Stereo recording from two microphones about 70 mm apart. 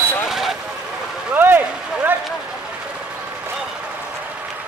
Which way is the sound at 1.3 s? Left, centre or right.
Right.